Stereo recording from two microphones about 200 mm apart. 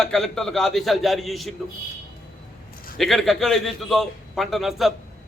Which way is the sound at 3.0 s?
Centre (ahead or behind).